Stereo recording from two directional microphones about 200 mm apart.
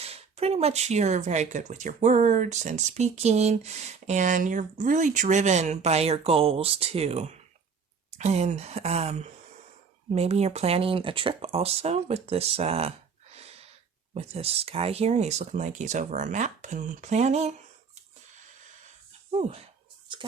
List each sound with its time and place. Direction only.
0.0 s speech: 30° right (ahead or behind)
13.3 s a sound: 30° right (ahead or behind)
14.1 s speech: 30° right (ahead or behind)
19.3 s speech: 30° right (ahead or behind)